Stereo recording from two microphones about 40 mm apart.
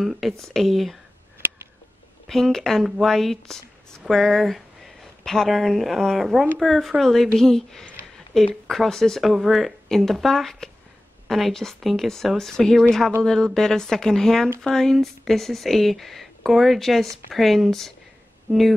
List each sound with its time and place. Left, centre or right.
0.0 s speech: centre
2.2 s speech: centre
4.1 s speech: centre
9.3 s speech: centre
9.8 s speech: centre